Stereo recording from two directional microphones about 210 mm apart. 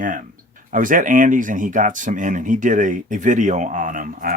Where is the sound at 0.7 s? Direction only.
40° right (ahead or behind).